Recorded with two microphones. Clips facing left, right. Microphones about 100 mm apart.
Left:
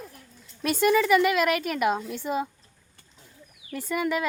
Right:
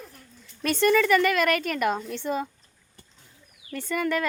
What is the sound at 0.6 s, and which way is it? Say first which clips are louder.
A woman's voice: even; 5° left (ahead or behind).